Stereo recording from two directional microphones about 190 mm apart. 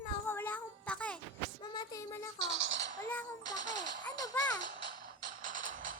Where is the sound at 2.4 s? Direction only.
70° right (ahead or behind).